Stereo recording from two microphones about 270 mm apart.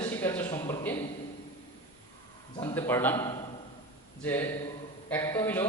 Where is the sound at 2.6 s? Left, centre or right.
Centre.